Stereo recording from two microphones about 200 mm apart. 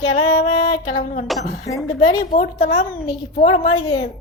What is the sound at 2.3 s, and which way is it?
A woman's voice, 40° left (ahead or behind).